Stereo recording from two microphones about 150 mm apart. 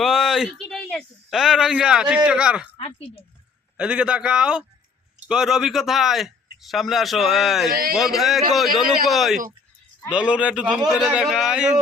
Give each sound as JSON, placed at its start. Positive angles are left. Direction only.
{"t": 0.0, "sound": "speech", "side_deg": 0}
{"t": 2.7, "sound": "a sound", "side_deg": 40}
{"t": 3.8, "sound": "a man's voice", "side_deg": -5}
{"t": 7.7, "sound": "speech", "side_deg": -80}
{"t": 7.9, "sound": "a man's voice", "side_deg": 0}